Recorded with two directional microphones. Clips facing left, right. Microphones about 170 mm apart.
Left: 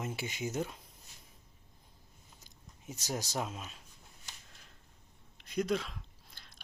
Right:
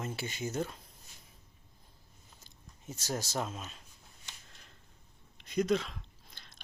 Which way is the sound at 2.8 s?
15° left (ahead or behind).